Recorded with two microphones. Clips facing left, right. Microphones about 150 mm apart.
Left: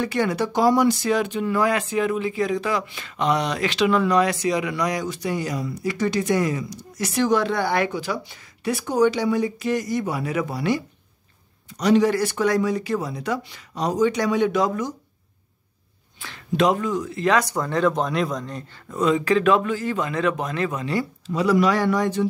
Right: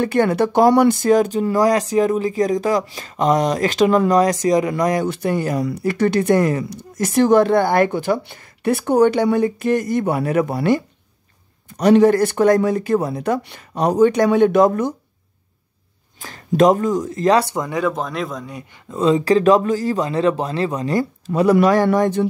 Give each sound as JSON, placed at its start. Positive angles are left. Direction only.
{"t": 0.0, "sound": "speech", "side_deg": -55}
{"t": 16.2, "sound": "speech", "side_deg": -40}
{"t": 17.6, "sound": "a man's voice", "side_deg": -10}
{"t": 18.9, "sound": "speech", "side_deg": -30}